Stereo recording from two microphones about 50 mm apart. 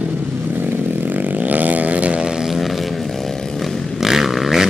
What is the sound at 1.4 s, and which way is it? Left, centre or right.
Vehicle, right.